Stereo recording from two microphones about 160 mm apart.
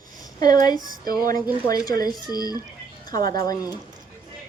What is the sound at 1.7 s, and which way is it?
Speech, 65° right (ahead or behind).